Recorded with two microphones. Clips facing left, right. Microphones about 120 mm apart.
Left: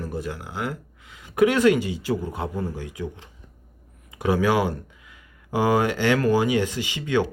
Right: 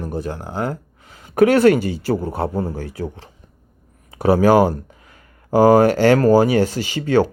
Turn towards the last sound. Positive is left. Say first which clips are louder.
# right 7 dB
turn(degrees=-40)  # may be behind; listen again after turning